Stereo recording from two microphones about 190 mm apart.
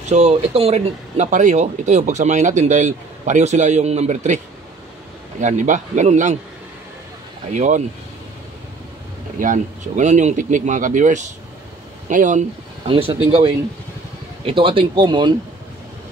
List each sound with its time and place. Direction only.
0.1 s speech: 35° right (ahead or behind)
5.4 s speech: 40° right (ahead or behind)
7.5 s speech: 40° right (ahead or behind)
9.4 s speech: 40° right (ahead or behind)
12.8 s speech: 30° right (ahead or behind)